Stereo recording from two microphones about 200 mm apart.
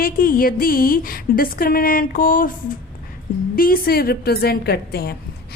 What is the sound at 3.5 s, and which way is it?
A woman's voice, 45° left (ahead or behind).